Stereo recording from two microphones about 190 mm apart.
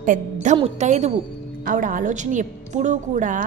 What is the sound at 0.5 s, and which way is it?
A woman's voice, 35° right (ahead or behind).